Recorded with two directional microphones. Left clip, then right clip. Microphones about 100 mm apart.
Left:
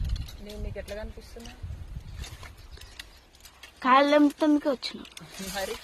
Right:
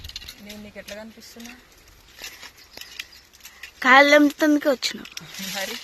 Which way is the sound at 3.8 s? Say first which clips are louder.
Right 6 dB; 25° right (ahead or behind).